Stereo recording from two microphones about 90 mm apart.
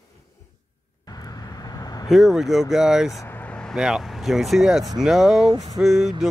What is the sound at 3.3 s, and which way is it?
Vehicle, 15° left (ahead or behind).